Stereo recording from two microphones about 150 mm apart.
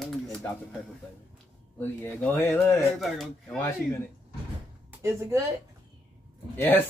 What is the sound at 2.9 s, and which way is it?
Speech, centre (ahead or behind).